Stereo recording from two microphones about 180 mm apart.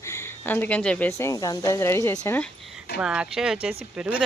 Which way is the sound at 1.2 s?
20° left (ahead or behind).